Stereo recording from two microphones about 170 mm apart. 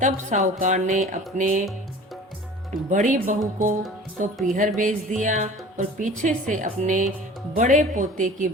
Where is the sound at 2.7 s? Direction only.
50° right (ahead or behind).